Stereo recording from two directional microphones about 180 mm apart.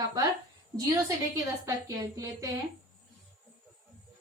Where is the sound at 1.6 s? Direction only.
15° right (ahead or behind).